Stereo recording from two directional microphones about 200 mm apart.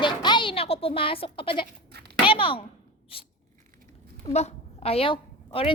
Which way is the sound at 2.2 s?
25° left (ahead or behind).